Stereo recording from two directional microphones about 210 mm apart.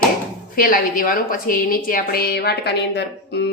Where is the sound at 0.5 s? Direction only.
45° left (ahead or behind).